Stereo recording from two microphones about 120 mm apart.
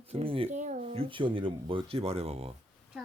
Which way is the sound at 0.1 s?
50° right (ahead or behind).